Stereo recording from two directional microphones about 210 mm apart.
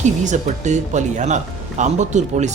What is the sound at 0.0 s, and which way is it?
Speech, 35° right (ahead or behind).